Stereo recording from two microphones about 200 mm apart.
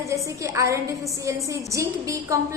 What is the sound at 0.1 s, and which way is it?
A woman's voice, 15° right (ahead or behind).